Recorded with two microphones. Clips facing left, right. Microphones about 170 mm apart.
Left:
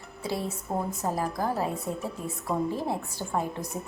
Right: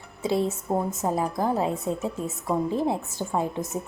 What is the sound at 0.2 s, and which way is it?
A woman's voice, 25° right (ahead or behind).